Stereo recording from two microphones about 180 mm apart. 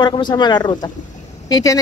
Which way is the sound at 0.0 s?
25° left (ahead or behind).